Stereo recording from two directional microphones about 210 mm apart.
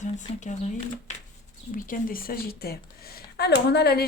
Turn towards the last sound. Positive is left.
turn(degrees=50)  # may be behind; listen again after turning